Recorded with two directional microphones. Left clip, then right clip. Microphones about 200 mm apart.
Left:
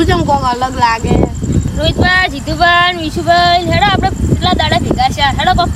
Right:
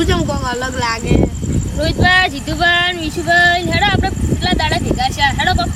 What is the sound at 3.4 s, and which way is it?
Speech, 30° left (ahead or behind).